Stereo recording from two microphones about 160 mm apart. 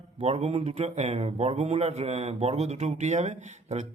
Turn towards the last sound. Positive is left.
turn(degrees=-50)  # may be behind; listen again after turning